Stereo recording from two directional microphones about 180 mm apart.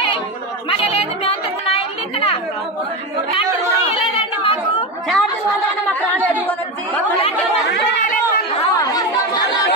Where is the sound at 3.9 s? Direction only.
30° left (ahead or behind).